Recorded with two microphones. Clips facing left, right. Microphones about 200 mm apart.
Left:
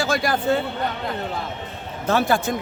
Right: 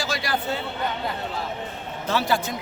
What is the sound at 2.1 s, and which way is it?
Speech, 50° left (ahead or behind).